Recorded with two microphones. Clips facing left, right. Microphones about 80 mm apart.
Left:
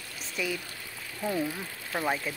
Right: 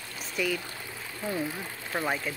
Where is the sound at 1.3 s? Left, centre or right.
Right.